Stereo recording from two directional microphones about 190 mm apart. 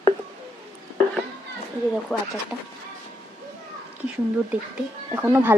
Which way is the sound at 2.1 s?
Centre (ahead or behind).